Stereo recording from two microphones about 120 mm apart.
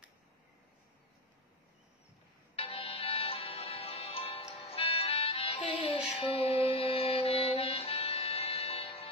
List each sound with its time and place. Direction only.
2.5 s music: 55° left (ahead or behind)